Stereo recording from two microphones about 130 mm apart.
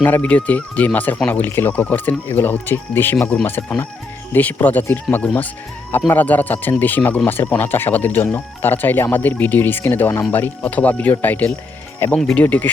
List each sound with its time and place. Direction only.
0.0 s speech: 15° left (ahead or behind)
3.4 s speech: 15° left (ahead or behind)